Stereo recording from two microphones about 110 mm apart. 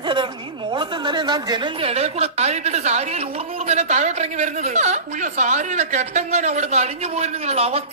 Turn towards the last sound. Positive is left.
turn(degrees=-70)  # may be behind; listen again after turning